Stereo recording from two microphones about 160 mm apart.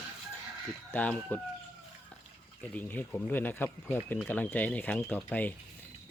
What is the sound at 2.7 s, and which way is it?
Speech, 10° left (ahead or behind).